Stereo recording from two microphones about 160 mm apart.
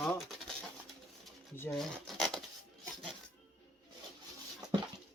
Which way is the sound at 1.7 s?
5° left (ahead or behind).